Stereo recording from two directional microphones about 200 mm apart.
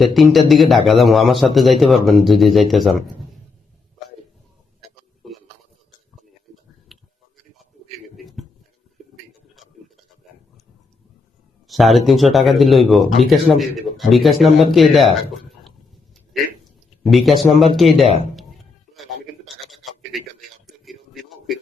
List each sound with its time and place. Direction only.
0.0 s a man's voice: centre (ahead or behind)
6.9 s tick: centre (ahead or behind)
7.9 s a sound: centre (ahead or behind)
11.7 s a man's voice: centre (ahead or behind)
17.0 s a man's voice: centre (ahead or behind)
18.0 s speech: 30° right (ahead or behind)
19.7 s a sound: centre (ahead or behind)